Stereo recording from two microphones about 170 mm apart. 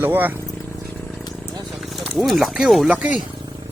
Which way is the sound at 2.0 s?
Centre (ahead or behind).